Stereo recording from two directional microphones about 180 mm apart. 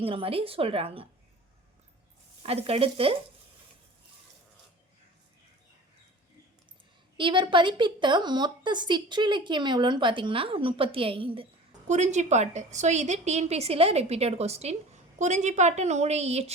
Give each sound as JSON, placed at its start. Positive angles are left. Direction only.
{"t": 0.0, "sound": "a woman's voice", "side_deg": -30}
{"t": 2.4, "sound": "a woman's voice", "side_deg": -35}
{"t": 7.2, "sound": "a woman's voice", "side_deg": -25}
{"t": 11.9, "sound": "a woman's voice", "side_deg": -40}